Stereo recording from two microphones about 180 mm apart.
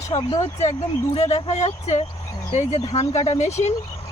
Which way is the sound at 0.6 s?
40° left (ahead or behind).